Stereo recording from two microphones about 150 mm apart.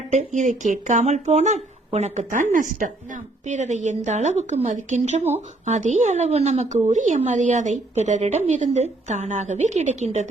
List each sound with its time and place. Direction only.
0.1 s speech: 55° right (ahead or behind)